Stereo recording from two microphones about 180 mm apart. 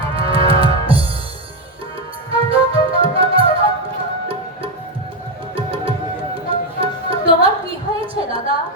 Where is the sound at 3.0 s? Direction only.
30° right (ahead or behind).